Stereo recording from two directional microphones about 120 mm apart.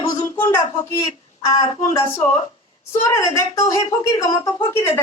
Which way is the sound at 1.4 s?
30° left (ahead or behind).